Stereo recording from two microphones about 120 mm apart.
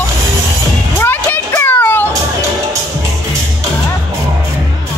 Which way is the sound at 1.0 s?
20° left (ahead or behind).